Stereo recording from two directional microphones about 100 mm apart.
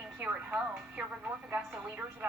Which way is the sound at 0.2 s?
15° right (ahead or behind).